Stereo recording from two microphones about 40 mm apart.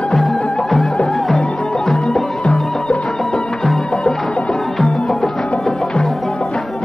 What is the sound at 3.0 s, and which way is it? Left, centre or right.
Music, centre.